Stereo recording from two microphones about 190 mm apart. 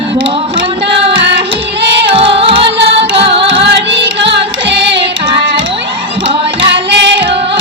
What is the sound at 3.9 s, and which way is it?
Carnatic music, 70° right (ahead or behind).